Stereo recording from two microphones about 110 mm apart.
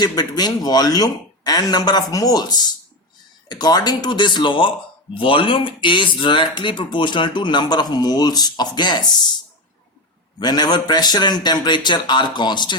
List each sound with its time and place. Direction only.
0.0 s a man's voice: 40° left (ahead or behind)
10.4 s a man's voice: 40° left (ahead or behind)